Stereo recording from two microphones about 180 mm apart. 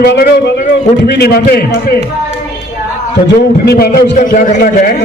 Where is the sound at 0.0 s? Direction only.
70° left (ahead or behind).